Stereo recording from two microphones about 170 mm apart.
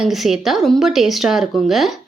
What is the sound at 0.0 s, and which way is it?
Speech, centre (ahead or behind).